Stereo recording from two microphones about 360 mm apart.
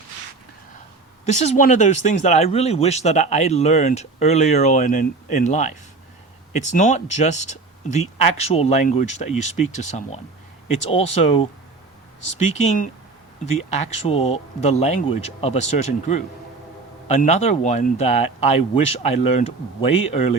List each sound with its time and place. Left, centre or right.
1.2 s speech: centre
12.5 s speech: centre